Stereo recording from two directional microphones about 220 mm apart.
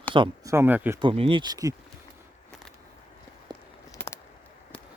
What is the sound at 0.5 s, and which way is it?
Speech, 10° right (ahead or behind).